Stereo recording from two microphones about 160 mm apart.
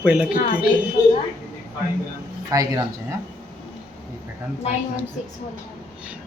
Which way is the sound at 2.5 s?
20° right (ahead or behind).